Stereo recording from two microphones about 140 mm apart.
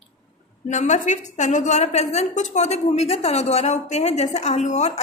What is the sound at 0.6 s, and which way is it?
A woman's voice, 60° left (ahead or behind).